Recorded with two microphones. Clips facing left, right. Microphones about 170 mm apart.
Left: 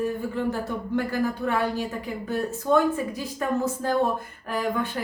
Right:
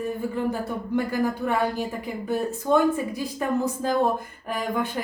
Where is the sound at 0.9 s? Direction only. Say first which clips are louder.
Right 1 dB; 15° right (ahead or behind).